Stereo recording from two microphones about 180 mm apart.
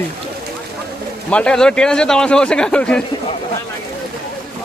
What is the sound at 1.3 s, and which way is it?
A man's voice, 5° left (ahead or behind).